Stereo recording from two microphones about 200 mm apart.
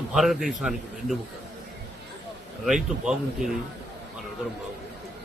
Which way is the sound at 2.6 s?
Centre (ahead or behind).